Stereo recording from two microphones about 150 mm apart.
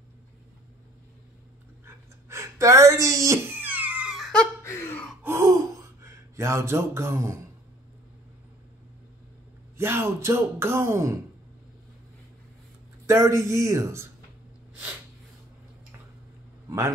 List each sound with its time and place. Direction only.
2.2 s whimper: 20° right (ahead or behind); by 4.5 s centre (ahead or behind)
4.6 s gasp: 15° left (ahead or behind)
5.2 s gasp: 20° right (ahead or behind)
9.8 s speech: 15° right (ahead or behind)
13.0 s speech: 20° right (ahead or behind)
14.7 s snort: 10° right (ahead or behind)